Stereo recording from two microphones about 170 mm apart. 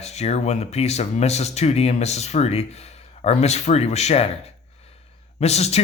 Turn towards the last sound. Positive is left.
turn(degrees=40)  # may be behind; listen again after turning